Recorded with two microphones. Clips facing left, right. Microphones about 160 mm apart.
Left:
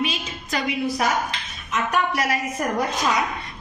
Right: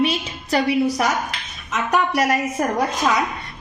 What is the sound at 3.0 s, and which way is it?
Speech, 55° right (ahead or behind).